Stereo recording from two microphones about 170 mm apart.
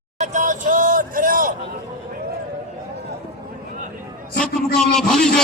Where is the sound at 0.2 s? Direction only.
50° right (ahead or behind).